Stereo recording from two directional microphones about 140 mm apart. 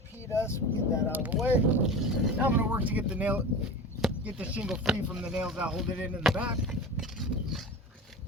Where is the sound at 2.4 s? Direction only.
15° right (ahead or behind).